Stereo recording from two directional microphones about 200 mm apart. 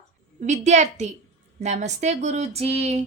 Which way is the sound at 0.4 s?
35° right (ahead or behind).